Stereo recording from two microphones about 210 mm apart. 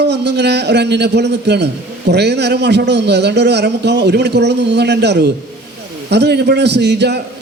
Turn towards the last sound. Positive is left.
turn(degrees=-55)  # may be behind; listen again after turning